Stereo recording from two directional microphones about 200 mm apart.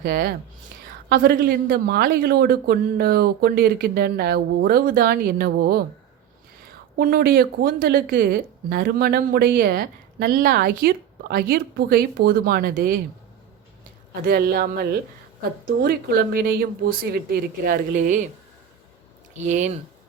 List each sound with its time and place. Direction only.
0.0 s a woman's voice: 50° right (ahead or behind)
6.9 s a woman's voice: 50° right (ahead or behind)
14.2 s a woman's voice: 45° right (ahead or behind)
19.5 s speech: 35° right (ahead or behind)